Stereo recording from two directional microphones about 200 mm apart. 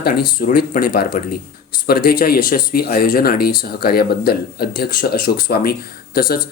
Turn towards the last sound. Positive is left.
turn(degrees=45)  # may be behind; listen again after turning